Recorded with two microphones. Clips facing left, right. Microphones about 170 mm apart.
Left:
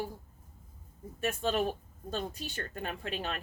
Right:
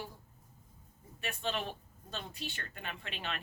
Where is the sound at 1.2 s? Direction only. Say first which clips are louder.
Left 7 dB; 45° left (ahead or behind).